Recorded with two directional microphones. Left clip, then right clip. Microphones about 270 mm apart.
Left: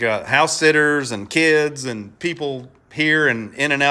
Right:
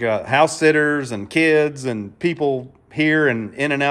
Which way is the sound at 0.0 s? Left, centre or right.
Centre.